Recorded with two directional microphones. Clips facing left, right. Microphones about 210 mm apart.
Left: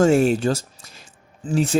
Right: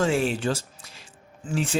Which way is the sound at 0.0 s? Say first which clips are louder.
Left 7 dB; 45° left (ahead or behind).